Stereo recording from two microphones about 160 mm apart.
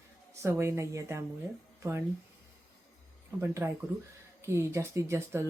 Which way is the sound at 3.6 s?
10° right (ahead or behind).